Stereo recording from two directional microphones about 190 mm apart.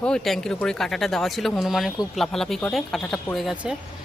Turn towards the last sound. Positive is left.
turn(degrees=-5)  # may be behind; listen again after turning